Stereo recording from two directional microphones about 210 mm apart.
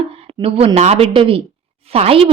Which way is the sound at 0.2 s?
25° right (ahead or behind).